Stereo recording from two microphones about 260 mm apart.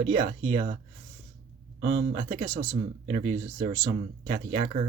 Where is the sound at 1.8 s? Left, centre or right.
Right.